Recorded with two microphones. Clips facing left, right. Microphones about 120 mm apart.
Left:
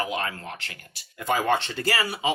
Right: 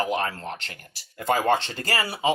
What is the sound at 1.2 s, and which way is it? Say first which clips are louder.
Speech: right 2 dB; 45° right (ahead or behind).